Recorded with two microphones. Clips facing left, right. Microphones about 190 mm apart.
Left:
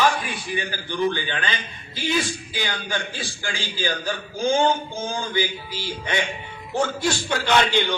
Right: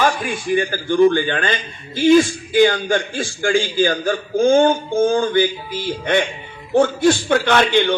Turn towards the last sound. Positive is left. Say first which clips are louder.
# right 5 dB
turn(degrees=-55)  # may be behind; listen again after turning